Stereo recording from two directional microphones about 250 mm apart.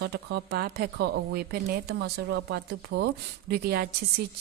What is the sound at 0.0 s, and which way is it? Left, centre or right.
Speech, right.